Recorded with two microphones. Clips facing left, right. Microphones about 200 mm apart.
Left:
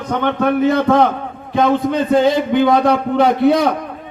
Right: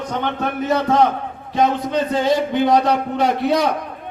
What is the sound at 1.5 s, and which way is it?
Speech, 55° left (ahead or behind).